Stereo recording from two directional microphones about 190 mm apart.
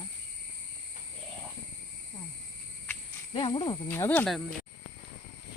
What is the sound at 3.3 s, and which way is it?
Speech, 25° left (ahead or behind).